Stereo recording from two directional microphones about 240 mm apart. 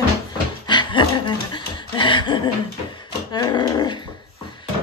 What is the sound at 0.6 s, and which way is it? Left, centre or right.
Dog, centre.